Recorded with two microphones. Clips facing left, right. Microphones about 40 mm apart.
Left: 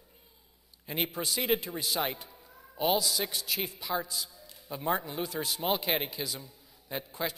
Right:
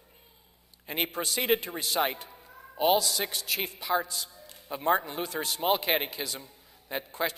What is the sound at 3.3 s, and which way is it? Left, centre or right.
Speech, centre.